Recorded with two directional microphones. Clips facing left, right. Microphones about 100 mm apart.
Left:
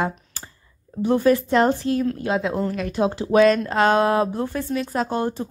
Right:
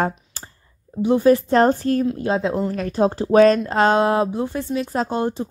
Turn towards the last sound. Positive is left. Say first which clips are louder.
# right 1 dB
turn(degrees=-25)  # may be behind; listen again after turning